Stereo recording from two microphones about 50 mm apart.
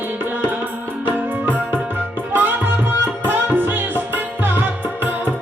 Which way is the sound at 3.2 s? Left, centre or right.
Right.